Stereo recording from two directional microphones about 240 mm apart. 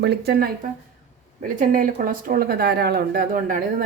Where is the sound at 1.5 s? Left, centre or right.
Right.